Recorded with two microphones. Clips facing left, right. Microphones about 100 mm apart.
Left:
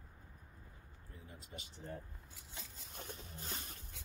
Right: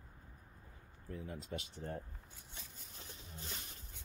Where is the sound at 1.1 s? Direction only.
90° right.